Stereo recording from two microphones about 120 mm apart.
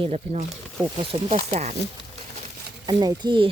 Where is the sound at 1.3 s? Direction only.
70° right (ahead or behind).